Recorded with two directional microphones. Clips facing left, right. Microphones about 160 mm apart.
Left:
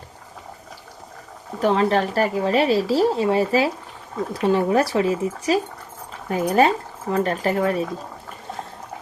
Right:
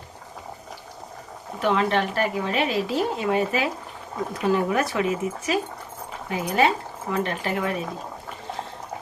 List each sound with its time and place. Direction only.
1.5 s speech: 35° left (ahead or behind)